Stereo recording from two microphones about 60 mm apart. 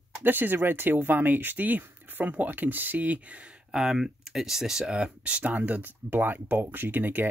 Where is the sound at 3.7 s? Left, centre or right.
Centre; by 7.2 s right.